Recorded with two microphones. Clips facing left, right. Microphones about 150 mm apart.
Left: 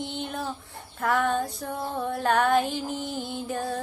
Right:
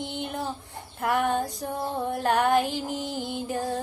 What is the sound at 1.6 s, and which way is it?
Music, 20° right (ahead or behind).